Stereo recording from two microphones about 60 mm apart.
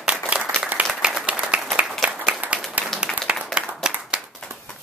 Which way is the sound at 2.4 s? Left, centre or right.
Right.